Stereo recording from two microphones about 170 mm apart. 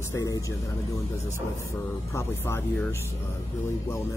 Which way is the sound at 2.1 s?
15° left (ahead or behind).